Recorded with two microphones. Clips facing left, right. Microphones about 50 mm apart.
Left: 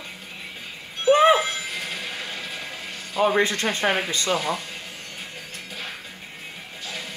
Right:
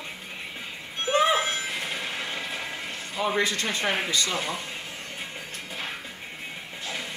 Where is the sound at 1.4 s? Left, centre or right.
Right.